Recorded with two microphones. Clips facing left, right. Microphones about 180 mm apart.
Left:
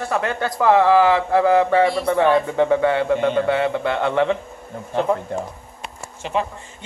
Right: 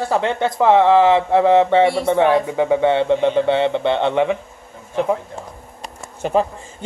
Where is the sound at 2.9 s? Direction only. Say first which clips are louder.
Right 3 dB; 25° right (ahead or behind).